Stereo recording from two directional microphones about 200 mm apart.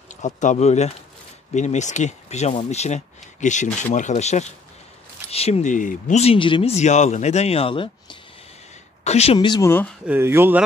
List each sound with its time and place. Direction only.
0.2 s speech: 40° left (ahead or behind); by 9.9 s 10° left (ahead or behind)
10.0 s speech: 10° right (ahead or behind)